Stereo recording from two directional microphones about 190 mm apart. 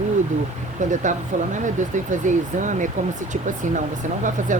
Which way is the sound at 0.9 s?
40° right (ahead or behind).